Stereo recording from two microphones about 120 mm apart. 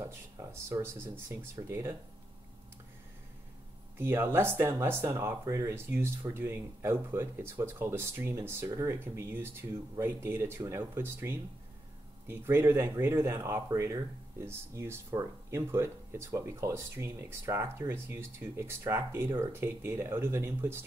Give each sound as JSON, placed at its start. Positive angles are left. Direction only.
{"t": 0.0, "sound": "speech", "side_deg": -20}
{"t": 4.0, "sound": "speech", "side_deg": -20}